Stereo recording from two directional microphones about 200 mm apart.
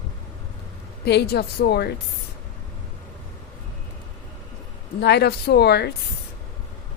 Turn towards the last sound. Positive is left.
turn(degrees=55)  # may be behind; listen again after turning